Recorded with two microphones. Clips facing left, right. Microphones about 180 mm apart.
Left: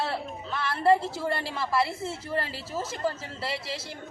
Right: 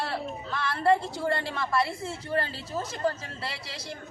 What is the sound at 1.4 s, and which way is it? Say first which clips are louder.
Speech: even; 30° left (ahead or behind).